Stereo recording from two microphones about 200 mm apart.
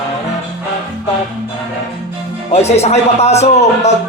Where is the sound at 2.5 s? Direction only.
35° left (ahead or behind).